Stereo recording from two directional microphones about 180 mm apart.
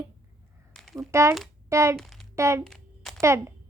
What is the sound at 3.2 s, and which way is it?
Speech, 15° right (ahead or behind).